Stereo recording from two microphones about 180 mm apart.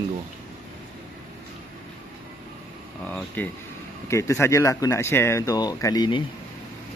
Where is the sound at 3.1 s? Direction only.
10° left (ahead or behind); by 6.2 s 25° left (ahead or behind).